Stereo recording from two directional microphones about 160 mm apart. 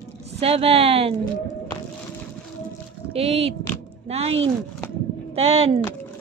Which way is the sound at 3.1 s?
40° right (ahead or behind).